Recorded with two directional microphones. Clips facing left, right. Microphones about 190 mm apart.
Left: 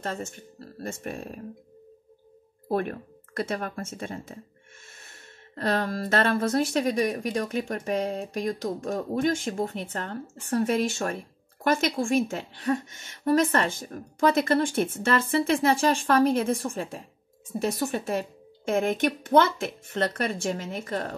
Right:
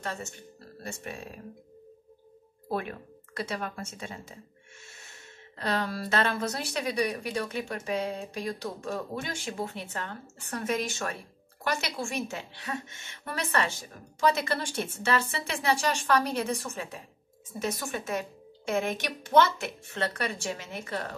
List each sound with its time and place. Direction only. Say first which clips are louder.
0.8 s speech: left 5 dB; 50° left (ahead or behind)
2.7 s speech: left 5 dB; 50° left (ahead or behind)
18.7 s speech: left 5 dB; 50° left (ahead or behind)